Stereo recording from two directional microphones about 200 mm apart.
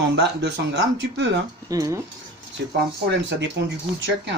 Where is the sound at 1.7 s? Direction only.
15° right (ahead or behind).